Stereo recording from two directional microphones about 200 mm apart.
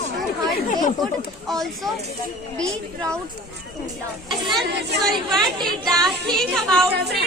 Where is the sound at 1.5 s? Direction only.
Centre (ahead or behind).